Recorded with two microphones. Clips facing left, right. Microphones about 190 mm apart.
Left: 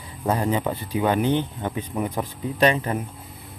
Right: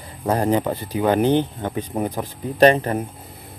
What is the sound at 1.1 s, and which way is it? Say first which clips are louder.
Speech: right 4 dB; 40° right (ahead or behind).